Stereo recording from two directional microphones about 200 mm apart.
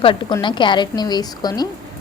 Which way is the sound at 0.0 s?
25° left (ahead or behind).